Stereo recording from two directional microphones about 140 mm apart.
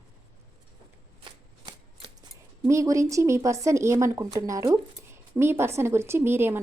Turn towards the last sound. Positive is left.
turn(degrees=-15)  # may be behind; listen again after turning